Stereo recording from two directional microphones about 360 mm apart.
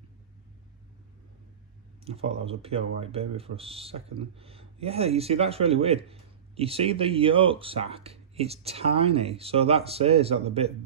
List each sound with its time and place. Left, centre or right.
2.0 s speech: centre